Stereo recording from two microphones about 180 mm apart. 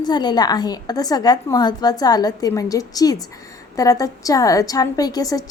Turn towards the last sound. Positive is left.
turn(degrees=20)  # may be behind; listen again after turning